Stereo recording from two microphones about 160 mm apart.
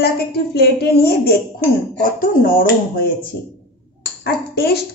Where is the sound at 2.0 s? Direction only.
60° left (ahead or behind).